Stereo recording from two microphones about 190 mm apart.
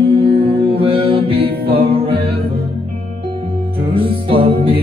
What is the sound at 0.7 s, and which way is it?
Mantra, 30° right (ahead or behind).